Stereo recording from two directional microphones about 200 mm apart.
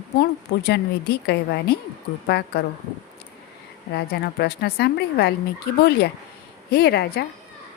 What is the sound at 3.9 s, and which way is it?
A woman's voice, 55° left (ahead or behind).